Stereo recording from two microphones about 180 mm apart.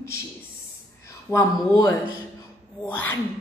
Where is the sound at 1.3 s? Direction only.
20° left (ahead or behind).